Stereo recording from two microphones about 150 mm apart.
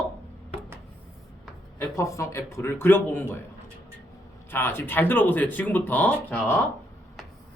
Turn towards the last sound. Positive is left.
turn(degrees=10)  # may be behind; listen again after turning